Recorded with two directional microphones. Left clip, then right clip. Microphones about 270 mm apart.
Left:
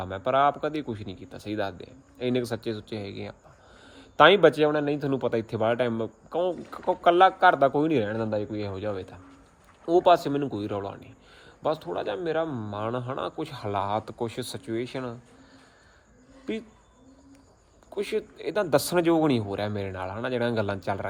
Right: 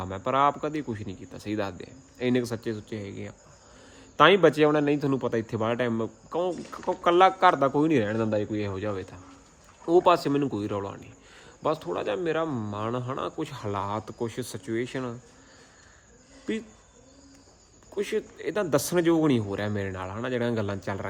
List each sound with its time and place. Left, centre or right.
0.0 s speech: centre
17.9 s speech: centre